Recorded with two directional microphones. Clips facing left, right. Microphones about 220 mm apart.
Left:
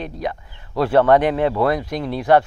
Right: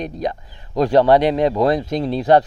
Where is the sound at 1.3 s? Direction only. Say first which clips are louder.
Right 2 dB; 15° right (ahead or behind).